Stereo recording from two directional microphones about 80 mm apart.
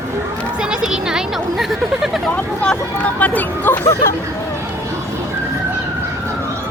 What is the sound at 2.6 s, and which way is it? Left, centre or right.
Speech, centre.